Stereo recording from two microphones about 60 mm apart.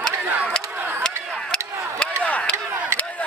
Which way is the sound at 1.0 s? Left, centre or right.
Centre.